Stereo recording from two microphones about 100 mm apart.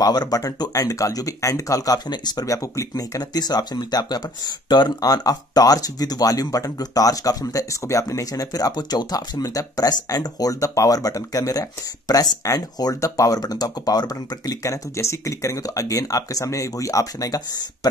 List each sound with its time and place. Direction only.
0.0 s speech: 40° left (ahead or behind)